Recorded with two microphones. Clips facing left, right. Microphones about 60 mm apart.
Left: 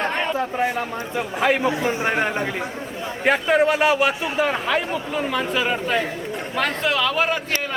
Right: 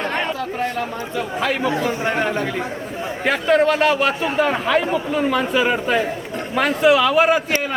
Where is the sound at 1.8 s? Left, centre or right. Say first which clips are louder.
Right 1 dB; left.